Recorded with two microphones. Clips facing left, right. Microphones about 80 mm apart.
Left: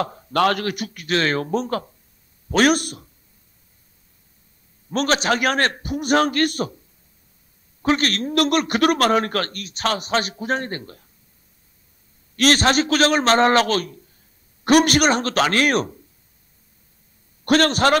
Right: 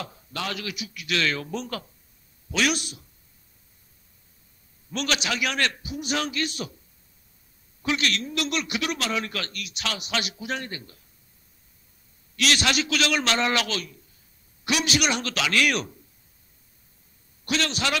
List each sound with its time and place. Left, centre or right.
0.0 s a man's voice: left
4.9 s a man's voice: left
7.8 s a man's voice: left
12.4 s a man's voice: left
17.5 s a man's voice: left